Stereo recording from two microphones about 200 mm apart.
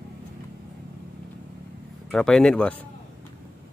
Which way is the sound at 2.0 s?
5° left (ahead or behind).